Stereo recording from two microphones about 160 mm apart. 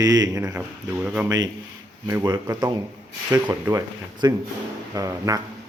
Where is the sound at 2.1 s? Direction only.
20° right (ahead or behind).